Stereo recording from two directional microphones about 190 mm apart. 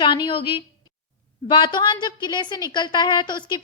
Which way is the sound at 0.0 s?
25° left (ahead or behind).